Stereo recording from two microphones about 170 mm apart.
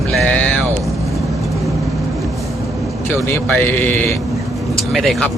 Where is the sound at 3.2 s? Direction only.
10° left (ahead or behind).